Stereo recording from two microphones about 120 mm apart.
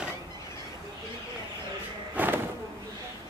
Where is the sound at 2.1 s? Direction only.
15° right (ahead or behind).